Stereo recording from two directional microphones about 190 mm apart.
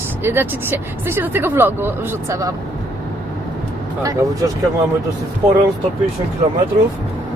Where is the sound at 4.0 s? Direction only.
20° right (ahead or behind).